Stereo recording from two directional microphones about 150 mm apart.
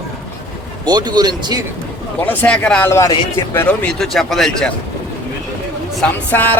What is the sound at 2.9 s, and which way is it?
A man's voice, 20° left (ahead or behind).